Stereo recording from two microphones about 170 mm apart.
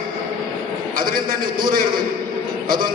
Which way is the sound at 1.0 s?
55° right (ahead or behind).